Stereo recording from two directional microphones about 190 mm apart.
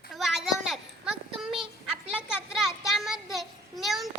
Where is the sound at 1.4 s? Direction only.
Centre (ahead or behind).